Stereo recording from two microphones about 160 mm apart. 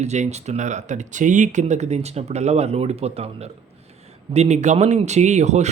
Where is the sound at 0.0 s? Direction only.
45° right (ahead or behind).